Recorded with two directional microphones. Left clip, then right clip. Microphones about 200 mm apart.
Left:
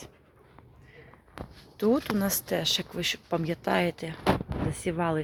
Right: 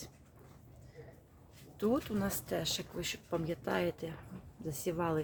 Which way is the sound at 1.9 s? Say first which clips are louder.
Left 7 dB; 35° left (ahead or behind).